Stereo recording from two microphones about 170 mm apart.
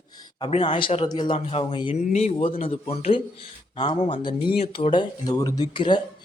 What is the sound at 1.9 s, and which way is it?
Speech, 40° left (ahead or behind).